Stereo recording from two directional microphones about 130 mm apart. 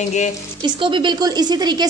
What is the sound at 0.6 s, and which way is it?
A woman's voice, 40° right (ahead or behind).